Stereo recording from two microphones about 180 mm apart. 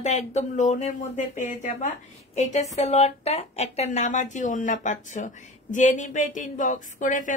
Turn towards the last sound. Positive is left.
turn(degrees=45)  # may be behind; listen again after turning